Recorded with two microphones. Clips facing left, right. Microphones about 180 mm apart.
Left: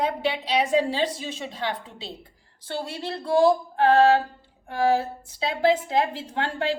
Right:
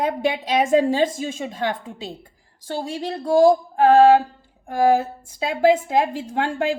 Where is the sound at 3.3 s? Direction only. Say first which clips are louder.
Right 4 dB; 45° right (ahead or behind).